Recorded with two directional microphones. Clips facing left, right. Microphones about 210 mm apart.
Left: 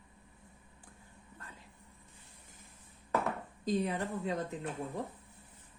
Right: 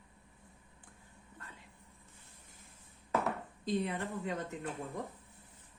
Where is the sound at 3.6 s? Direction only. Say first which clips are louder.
Left 2 dB; 40° left (ahead or behind).